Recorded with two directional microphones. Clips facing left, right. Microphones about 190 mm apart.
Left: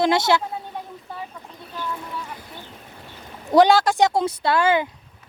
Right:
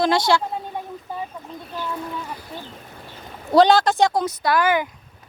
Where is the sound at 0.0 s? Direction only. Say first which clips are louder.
Even; 20° left (ahead or behind).